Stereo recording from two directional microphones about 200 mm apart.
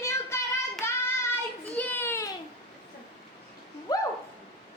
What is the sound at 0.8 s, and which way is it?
Child singing, 10° left (ahead or behind).